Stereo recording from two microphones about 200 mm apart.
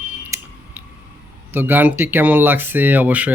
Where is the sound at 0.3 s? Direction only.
15° right (ahead or behind).